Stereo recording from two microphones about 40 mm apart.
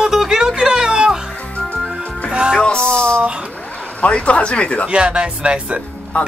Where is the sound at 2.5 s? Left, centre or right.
Left.